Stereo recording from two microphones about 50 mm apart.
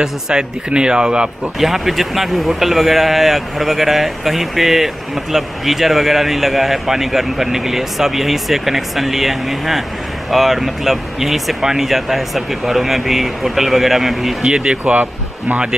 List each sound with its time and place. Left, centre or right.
0.0 s a man's voice: centre
1.6 s speech: centre
14.4 s speech: centre